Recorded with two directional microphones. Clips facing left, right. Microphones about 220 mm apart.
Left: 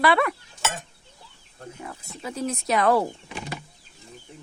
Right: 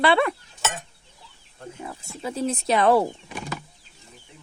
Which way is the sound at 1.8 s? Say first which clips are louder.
Right 3 dB; 25° right (ahead or behind).